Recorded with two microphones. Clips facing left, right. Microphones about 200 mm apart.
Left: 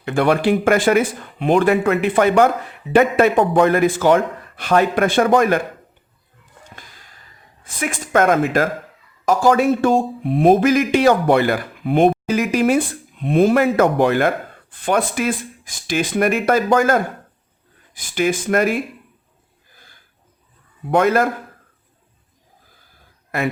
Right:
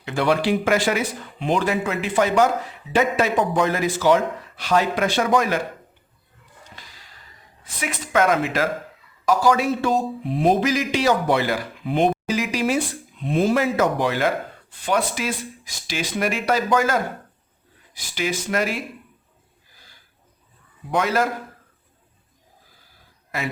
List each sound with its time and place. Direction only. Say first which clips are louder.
0.0 s speech: left 4 dB; 55° left (ahead or behind)
6.7 s gasp: left 3 dB; 50° left (ahead or behind)
7.6 s speech: left 4 dB; 50° left (ahead or behind)
19.7 s a sound: left 3 dB; 50° left (ahead or behind)
20.9 s speech: left 6 dB; 55° left (ahead or behind)